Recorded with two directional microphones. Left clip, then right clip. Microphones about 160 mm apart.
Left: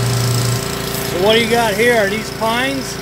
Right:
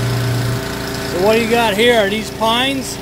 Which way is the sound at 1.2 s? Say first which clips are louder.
Even; 10° right (ahead or behind).